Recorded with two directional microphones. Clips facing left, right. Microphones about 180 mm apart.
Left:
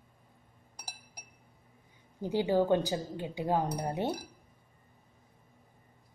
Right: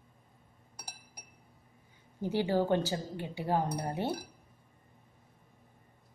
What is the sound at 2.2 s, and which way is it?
Speech, 15° left (ahead or behind).